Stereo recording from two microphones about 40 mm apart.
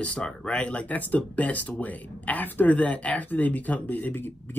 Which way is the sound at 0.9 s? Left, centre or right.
Left.